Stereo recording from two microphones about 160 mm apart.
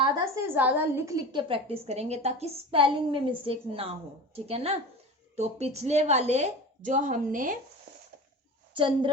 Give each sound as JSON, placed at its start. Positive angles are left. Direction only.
{"t": 0.4, "sound": "a woman's voice", "side_deg": -10}
{"t": 8.7, "sound": "a woman's voice", "side_deg": -30}